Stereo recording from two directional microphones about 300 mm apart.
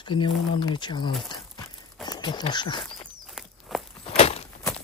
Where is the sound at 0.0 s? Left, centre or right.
Centre.